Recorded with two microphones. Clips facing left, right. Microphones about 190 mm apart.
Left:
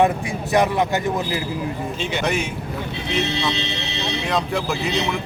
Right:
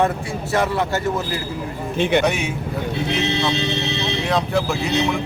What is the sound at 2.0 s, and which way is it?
Speech, 60° right (ahead or behind).